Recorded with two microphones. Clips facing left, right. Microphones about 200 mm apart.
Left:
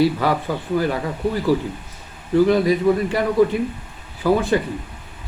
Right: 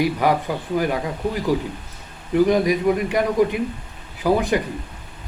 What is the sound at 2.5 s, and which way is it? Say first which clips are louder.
Speech: left 2 dB; 15° right (ahead or behind).